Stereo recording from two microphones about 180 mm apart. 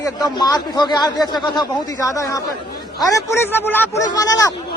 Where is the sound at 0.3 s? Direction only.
25° left (ahead or behind).